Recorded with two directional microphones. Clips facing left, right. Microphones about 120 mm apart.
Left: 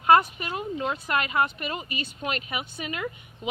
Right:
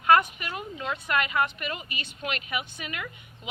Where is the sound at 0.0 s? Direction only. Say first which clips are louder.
Left 2 dB; 30° left (ahead or behind).